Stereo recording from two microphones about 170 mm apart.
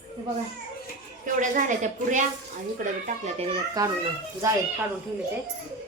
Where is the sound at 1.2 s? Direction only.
50° right (ahead or behind).